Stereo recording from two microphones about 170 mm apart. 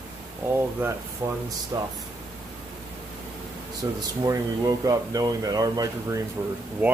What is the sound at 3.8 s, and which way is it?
Speech, 20° right (ahead or behind).